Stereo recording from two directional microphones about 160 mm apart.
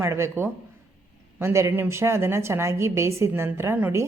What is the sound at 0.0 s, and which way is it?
A woman's voice, 15° right (ahead or behind).